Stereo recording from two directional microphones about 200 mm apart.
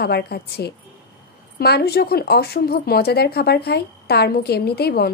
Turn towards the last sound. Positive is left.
turn(degrees=50)  # may be behind; listen again after turning